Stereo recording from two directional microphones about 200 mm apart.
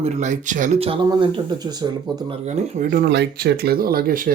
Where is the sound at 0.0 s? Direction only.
35° right (ahead or behind).